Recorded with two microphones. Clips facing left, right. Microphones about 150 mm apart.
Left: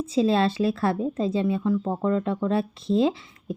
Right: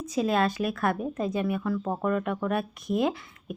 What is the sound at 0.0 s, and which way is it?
Speech, 25° left (ahead or behind).